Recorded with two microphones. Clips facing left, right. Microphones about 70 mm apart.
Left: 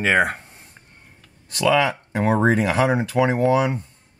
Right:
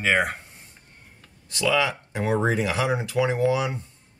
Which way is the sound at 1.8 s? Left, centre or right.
Left.